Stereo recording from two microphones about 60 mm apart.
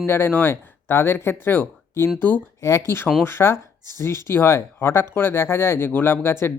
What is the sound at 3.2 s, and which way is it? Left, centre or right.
Speech, left.